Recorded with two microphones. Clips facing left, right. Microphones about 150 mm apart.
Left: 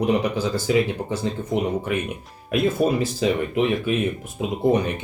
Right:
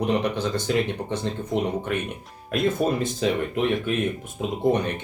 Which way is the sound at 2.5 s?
5° left (ahead or behind).